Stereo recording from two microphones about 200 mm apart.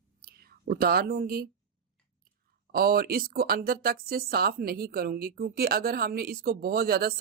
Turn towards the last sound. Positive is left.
turn(degrees=-50)  # may be behind; listen again after turning